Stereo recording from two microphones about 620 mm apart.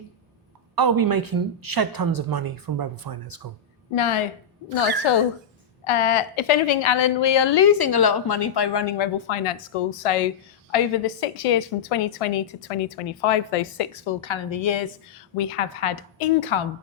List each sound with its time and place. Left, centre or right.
0.8 s speech: right
3.9 s a woman's voice: left
15.4 s a woman's voice: left